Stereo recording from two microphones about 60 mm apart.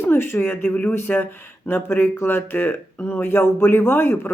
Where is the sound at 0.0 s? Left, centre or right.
Left.